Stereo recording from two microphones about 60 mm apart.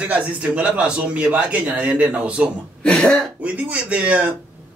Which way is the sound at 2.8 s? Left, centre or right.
Centre.